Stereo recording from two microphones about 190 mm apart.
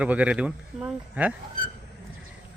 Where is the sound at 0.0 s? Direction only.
5° right (ahead or behind).